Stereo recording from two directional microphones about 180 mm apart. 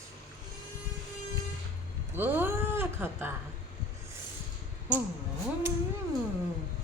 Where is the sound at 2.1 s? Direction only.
10° right (ahead or behind).